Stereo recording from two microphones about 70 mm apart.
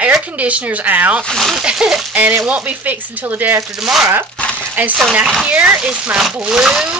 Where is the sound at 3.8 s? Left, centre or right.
Centre.